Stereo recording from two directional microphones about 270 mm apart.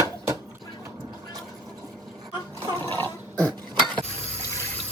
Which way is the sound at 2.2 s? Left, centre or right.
Centre.